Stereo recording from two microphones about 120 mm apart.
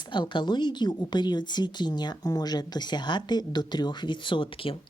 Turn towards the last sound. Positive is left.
turn(degrees=45)  # may be behind; listen again after turning